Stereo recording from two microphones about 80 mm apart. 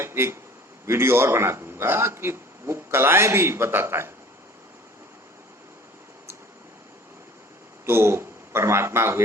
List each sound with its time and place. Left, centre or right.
0.0 s a man's voice: right
7.9 s a man's voice: right